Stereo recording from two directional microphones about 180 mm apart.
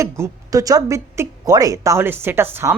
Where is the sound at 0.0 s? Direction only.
20° right (ahead or behind).